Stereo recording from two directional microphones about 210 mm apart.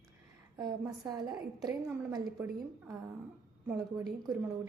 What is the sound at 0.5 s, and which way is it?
A woman's voice, 20° right (ahead or behind).